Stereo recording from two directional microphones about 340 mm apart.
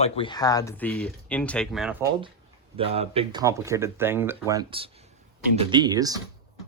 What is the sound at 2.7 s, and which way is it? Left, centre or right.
Speech, centre.